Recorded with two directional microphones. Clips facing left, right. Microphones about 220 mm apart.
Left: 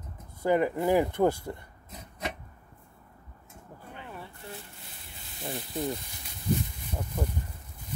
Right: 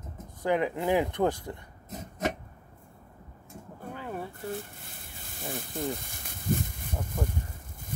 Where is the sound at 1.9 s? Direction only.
45° right (ahead or behind).